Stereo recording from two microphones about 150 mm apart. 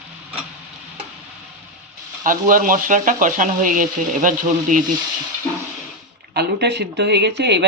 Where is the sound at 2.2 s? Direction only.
65° right (ahead or behind).